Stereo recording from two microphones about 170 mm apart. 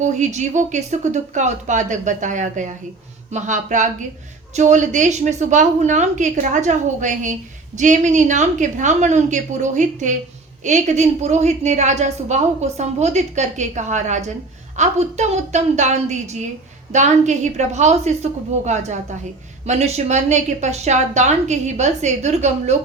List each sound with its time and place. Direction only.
0.0 s a woman's voice: 45° right (ahead or behind)